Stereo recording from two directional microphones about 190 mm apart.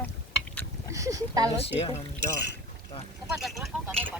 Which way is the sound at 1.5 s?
30° left (ahead or behind).